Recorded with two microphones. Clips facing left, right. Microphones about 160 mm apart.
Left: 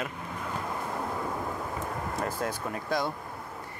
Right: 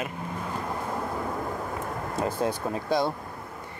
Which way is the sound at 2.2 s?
30° right (ahead or behind).